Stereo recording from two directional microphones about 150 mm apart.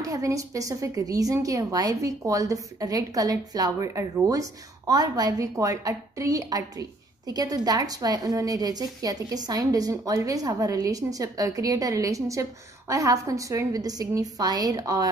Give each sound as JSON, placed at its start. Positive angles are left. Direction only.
{"t": 0.0, "sound": "a woman's voice", "side_deg": -20}